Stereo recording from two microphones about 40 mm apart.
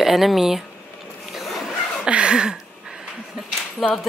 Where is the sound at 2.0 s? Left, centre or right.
Right.